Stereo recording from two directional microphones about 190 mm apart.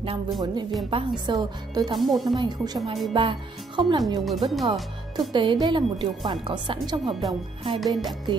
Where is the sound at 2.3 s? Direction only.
20° right (ahead or behind).